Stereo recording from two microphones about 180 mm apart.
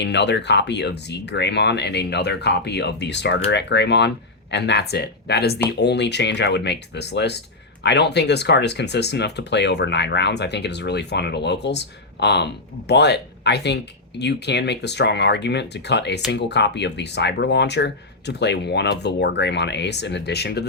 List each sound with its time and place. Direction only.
0.0 s speech: 70° left (ahead or behind)